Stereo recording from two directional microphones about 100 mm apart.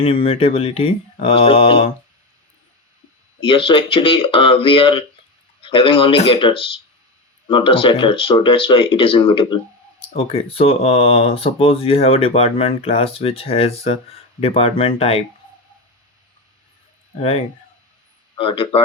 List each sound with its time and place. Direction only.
0.0 s speech: 70° left (ahead or behind)
3.4 s speech: 60° left (ahead or behind)
10.2 s speech: 80° left
17.2 s speech: 75° left (ahead or behind)